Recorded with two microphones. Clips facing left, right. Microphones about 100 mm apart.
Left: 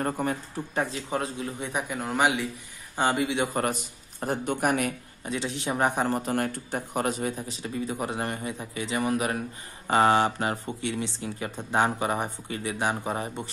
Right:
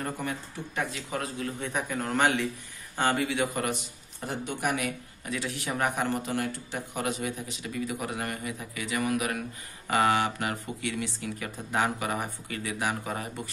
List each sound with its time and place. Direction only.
0.0 s speech: 40° left (ahead or behind)
1.6 s a man's voice: 10° left (ahead or behind)
4.2 s speech: 45° left (ahead or behind)
5.2 s speech: 25° left (ahead or behind)